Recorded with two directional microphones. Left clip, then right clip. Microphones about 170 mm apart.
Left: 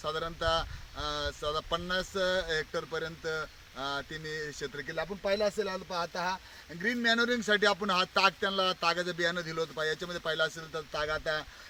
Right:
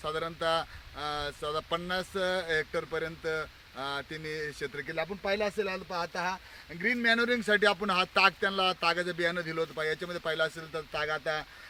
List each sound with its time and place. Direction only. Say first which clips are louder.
0.0 s speech: right 1 dB; 15° right (ahead or behind)